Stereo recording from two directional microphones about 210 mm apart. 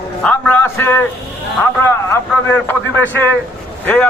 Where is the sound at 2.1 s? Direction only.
10° left (ahead or behind).